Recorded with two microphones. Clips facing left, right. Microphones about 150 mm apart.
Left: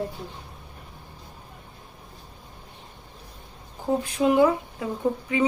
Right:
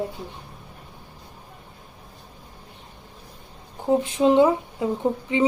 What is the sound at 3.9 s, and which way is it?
A woman's voice, 20° right (ahead or behind).